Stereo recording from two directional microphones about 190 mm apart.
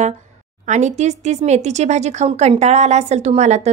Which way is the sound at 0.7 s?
40° right (ahead or behind).